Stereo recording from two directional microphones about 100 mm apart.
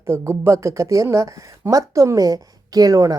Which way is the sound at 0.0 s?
25° right (ahead or behind).